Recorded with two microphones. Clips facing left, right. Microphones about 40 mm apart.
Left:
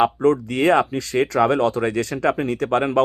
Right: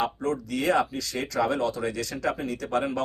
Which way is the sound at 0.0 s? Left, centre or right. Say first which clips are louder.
Left 10 dB; left.